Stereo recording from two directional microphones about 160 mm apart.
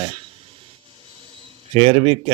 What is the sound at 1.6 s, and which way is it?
Speech, 40° right (ahead or behind).